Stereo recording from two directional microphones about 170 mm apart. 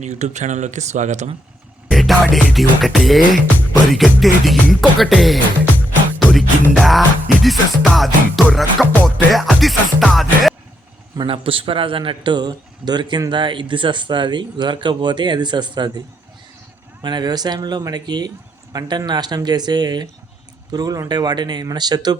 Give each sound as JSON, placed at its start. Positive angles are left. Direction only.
{"t": 0.0, "sound": "speech", "side_deg": -45}
{"t": 1.9, "sound": "music", "side_deg": 0}
{"t": 11.2, "sound": "a man's voice", "side_deg": -30}
{"t": 17.0, "sound": "a man's voice", "side_deg": -25}